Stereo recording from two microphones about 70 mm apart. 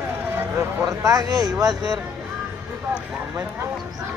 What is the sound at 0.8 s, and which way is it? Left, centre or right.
Speech, right.